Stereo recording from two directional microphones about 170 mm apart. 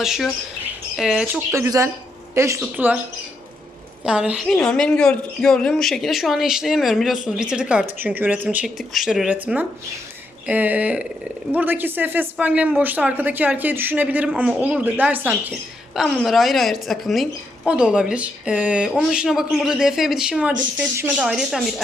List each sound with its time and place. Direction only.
0.0 s a woman's voice: centre (ahead or behind)
1.5 s a woman's voice: 20° right (ahead or behind)
4.0 s a woman's voice: 5° right (ahead or behind)